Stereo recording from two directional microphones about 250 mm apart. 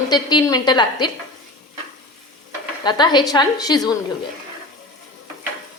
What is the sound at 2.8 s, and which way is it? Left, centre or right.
A woman's voice, centre.